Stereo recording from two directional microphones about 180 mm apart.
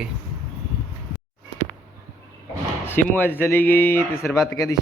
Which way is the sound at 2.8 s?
10° left (ahead or behind).